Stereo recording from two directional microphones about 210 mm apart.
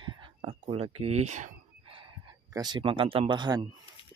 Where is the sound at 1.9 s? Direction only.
25° right (ahead or behind).